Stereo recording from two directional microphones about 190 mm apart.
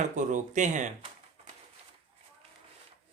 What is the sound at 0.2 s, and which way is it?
Speech, 40° right (ahead or behind).